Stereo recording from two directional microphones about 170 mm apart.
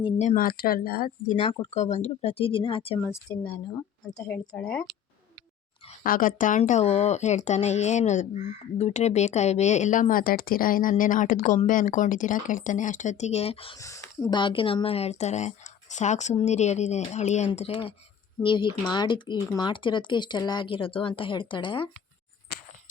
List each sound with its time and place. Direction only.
0.2 s speech: 45° left (ahead or behind)
0.4 s speech: 60° left (ahead or behind)
1.3 s a woman's voice: 35° left (ahead or behind)
3.0 s speech: 15° left (ahead or behind)
6.0 s speech: 55° left (ahead or behind); by 13.7 s 35° left (ahead or behind)
13.7 s speech: 20° left (ahead or behind)
14.3 s a woman's voice: 30° left (ahead or behind)